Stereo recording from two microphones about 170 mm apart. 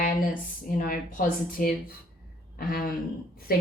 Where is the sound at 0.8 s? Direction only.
50° left (ahead or behind).